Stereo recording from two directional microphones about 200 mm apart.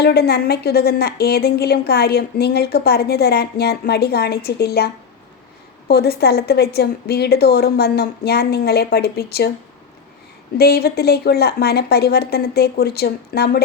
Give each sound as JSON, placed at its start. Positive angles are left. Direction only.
{"t": 0.0, "sound": "a woman's voice", "side_deg": 55}
{"t": 5.9, "sound": "a woman's voice", "side_deg": 50}
{"t": 10.6, "sound": "a woman's voice", "side_deg": 50}